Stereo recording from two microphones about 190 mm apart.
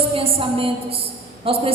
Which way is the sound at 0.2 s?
30° right (ahead or behind).